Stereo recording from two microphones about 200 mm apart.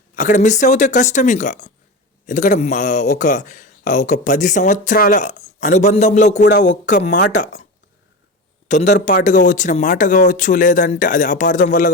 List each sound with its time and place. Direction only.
0.2 s a man's voice: 40° left (ahead or behind)
6.4 s speech: 60° left (ahead or behind)
6.7 s a man's voice: 35° left (ahead or behind)
8.6 s a man's voice: 35° left (ahead or behind)